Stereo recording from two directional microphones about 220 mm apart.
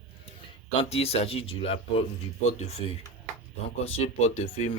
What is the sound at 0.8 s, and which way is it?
Speech, 25° left (ahead or behind).